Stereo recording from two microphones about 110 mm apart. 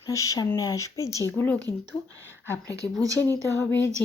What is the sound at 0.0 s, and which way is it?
Speech, 30° left (ahead or behind).